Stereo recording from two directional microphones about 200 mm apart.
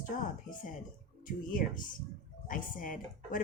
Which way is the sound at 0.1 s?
40° left (ahead or behind).